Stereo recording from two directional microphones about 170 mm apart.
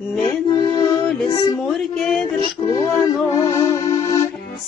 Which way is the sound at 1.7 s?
Centre (ahead or behind).